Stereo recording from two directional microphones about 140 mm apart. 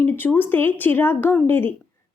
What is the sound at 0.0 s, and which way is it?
Speech, 15° left (ahead or behind).